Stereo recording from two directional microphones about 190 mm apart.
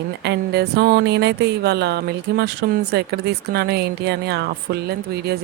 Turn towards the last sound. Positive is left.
turn(degrees=-60)  # may be behind; listen again after turning